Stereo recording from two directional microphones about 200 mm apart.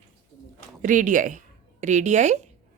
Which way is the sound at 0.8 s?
40° right (ahead or behind).